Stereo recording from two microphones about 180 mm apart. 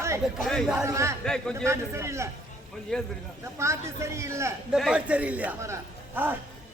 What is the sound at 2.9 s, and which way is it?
Speech, 5° left (ahead or behind).